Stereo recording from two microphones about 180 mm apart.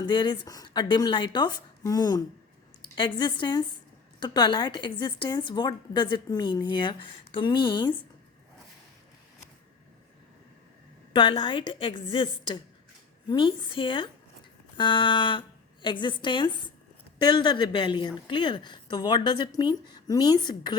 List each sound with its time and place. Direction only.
0.0 s a woman's voice: 25° left (ahead or behind)
11.1 s a woman's voice: 25° left (ahead or behind)